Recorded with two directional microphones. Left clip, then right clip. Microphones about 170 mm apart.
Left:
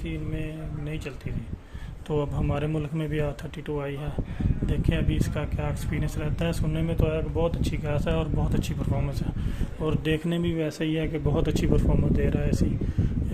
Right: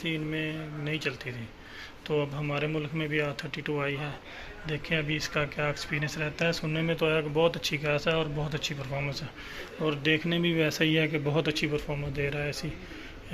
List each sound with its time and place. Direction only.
0.0 s speech: 10° left (ahead or behind)
2.0 s speech: 40° left (ahead or behind)
4.7 s speech: 35° left (ahead or behind)
6.7 s speech: 20° left (ahead or behind)
11.5 s speech: 40° left (ahead or behind)